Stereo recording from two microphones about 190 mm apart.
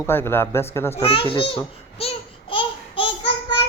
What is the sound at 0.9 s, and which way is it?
Babbling, 30° left (ahead or behind).